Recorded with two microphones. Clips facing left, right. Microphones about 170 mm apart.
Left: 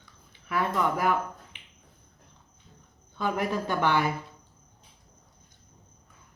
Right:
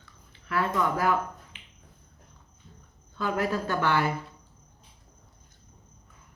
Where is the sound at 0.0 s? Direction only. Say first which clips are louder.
Right 1 dB; 15° left (ahead or behind).